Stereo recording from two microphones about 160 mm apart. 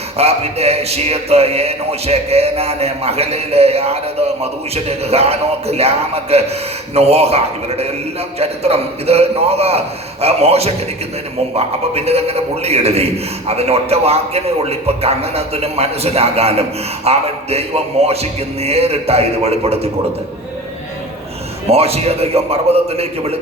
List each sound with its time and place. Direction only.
0.2 s a man's voice: 40° right (ahead or behind)
21.7 s a man's voice: 40° right (ahead or behind)